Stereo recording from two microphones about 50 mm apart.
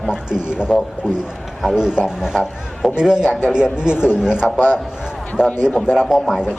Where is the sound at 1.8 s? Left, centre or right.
Centre.